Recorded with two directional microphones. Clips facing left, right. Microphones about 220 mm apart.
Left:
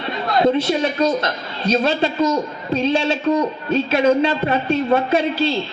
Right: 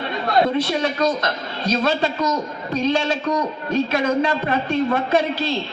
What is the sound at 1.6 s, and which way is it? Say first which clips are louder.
Speech: left 2 dB; 30° left (ahead or behind).